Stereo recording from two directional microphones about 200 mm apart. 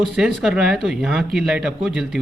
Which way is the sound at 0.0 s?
Centre (ahead or behind).